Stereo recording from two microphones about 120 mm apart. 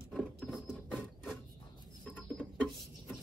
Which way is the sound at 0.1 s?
Centre (ahead or behind).